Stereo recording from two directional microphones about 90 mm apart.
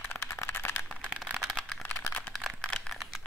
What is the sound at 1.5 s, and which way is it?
Computer keyboard, 5° left (ahead or behind).